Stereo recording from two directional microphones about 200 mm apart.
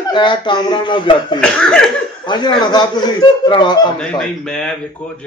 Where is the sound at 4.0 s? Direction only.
5° left (ahead or behind).